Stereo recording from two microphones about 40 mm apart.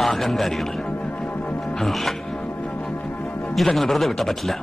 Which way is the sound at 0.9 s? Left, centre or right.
Left.